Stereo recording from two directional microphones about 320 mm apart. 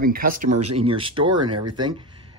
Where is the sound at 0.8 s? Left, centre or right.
Centre.